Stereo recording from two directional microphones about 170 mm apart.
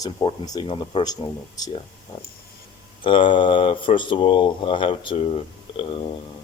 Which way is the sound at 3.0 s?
30° left (ahead or behind).